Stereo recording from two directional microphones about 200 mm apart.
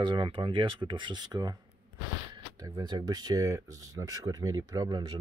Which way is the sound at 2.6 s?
20° right (ahead or behind).